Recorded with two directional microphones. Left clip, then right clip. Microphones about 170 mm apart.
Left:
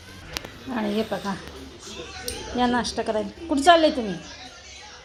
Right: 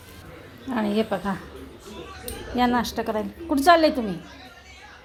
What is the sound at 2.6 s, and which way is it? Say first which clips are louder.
A woman's voice: right 1 dB; 15° right (ahead or behind).